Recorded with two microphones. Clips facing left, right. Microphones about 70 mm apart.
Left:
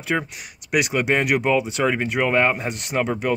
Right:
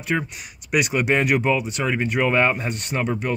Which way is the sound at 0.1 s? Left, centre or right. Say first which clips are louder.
Even; centre.